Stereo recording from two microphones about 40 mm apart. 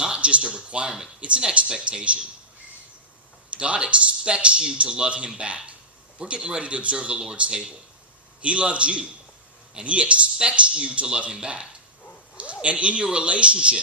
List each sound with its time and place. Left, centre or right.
0.0 s a sound: right
1.2 s a man's voice: right
3.5 s a man's voice: right
12.6 s a man's voice: right